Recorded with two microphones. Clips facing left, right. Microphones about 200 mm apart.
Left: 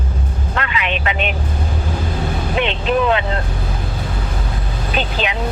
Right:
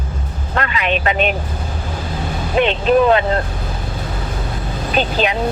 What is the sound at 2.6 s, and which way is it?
Vehicle, 40° right (ahead or behind).